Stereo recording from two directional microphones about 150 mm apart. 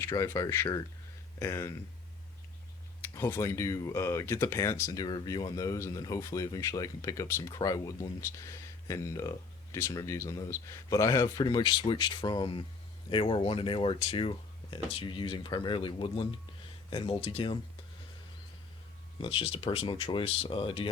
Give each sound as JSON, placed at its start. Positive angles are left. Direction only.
{"t": 0.0, "sound": "speech", "side_deg": 20}
{"t": 3.0, "sound": "speech", "side_deg": 15}
{"t": 19.2, "sound": "speech", "side_deg": 40}